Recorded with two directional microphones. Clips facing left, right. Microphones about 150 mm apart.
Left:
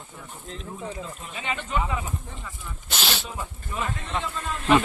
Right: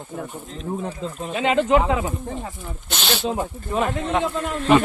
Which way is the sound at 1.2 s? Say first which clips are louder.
Right 13 dB; 85° right.